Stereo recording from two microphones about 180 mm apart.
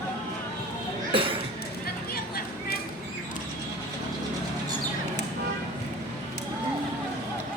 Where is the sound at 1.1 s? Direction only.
30° right (ahead or behind).